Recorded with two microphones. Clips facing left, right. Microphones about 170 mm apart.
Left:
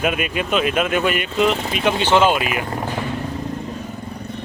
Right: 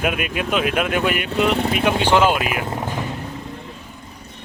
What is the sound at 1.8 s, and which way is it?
Speech, 10° right (ahead or behind).